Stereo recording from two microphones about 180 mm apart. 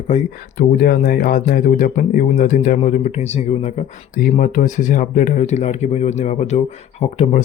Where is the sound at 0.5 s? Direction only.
55° left (ahead or behind).